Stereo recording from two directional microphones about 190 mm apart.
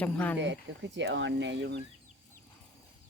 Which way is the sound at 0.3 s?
70° right (ahead or behind).